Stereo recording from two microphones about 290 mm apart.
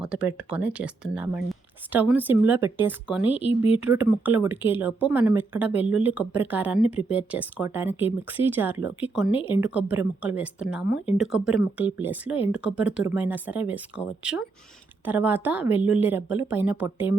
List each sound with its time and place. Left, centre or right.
0.0 s speech: centre
9.3 s speech: centre
9.6 s speech: centre